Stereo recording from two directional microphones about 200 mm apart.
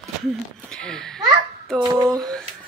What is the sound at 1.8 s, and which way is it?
Speech, 20° right (ahead or behind).